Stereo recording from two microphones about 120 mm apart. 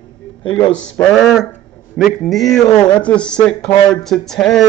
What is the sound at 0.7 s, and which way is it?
Speech, 10° left (ahead or behind).